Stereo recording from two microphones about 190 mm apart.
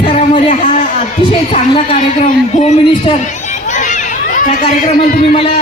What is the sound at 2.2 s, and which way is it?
Speech, 30° left (ahead or behind).